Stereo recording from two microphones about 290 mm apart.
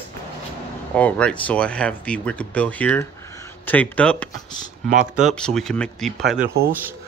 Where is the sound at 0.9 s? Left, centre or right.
Centre.